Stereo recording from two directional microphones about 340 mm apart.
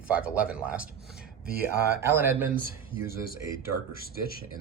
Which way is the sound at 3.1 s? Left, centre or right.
Left.